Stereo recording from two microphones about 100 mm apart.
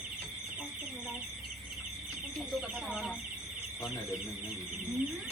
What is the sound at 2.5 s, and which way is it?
Speech, centre (ahead or behind).